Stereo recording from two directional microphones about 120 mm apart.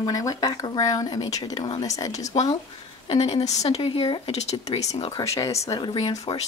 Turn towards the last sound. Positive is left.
turn(degrees=50)  # may be behind; listen again after turning